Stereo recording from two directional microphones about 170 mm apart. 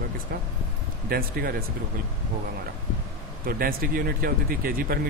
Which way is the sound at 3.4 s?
60° right (ahead or behind).